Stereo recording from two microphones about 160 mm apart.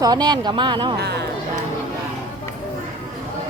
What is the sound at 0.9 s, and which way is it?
Speech, 90° right.